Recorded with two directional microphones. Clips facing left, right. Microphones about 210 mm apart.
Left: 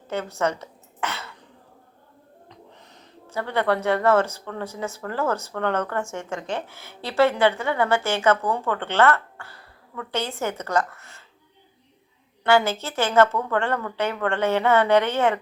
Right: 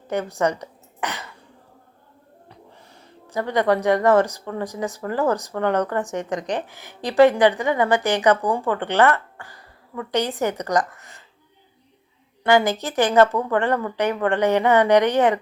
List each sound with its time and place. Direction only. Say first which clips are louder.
0.1 s throat clearing: right 3 dB; 15° right (ahead or behind)
2.5 s speech: right 1 dB; 10° right (ahead or behind)
12.4 s speech: right 2 dB; 15° right (ahead or behind)